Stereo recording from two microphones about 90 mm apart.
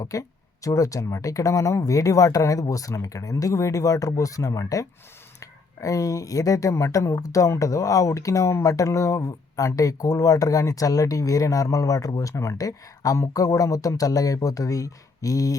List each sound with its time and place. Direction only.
0.0 s speech: 40° left (ahead or behind)